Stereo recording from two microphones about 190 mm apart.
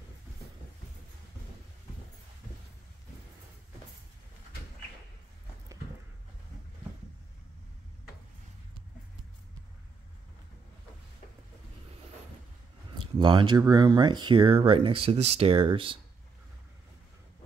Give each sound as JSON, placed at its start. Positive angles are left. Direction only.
{"t": 13.0, "sound": "speech", "side_deg": -25}